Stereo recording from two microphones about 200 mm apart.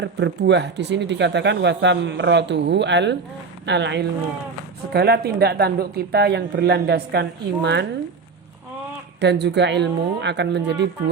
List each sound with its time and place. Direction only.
0.0 s speech: 60° right (ahead or behind)
9.2 s speech: 60° right (ahead or behind)